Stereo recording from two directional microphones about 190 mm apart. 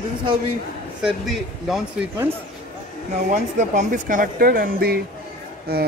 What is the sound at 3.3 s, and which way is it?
Speech, 40° right (ahead or behind).